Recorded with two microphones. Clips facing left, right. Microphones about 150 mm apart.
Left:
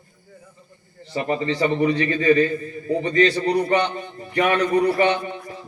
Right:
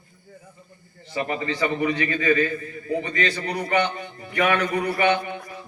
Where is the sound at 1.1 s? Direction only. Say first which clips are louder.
Left 4 dB; 30° left (ahead or behind).